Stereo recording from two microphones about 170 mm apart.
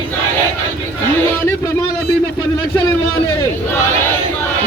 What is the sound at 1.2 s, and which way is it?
Speech, 20° left (ahead or behind).